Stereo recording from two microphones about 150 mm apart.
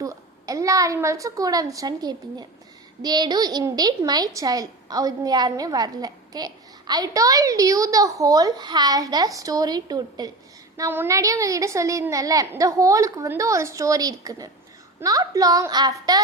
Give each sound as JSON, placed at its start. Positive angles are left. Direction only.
{"t": 0.0, "sound": "a child's voice", "side_deg": -20}
{"t": 10.8, "sound": "a woman's voice", "side_deg": -15}